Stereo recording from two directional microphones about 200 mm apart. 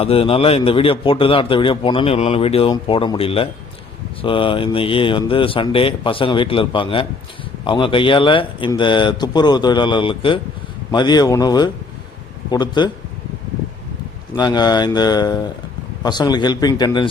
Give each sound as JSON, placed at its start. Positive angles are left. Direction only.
{"t": 0.0, "sound": "a man's voice", "side_deg": 30}
{"t": 14.3, "sound": "a man's voice", "side_deg": 20}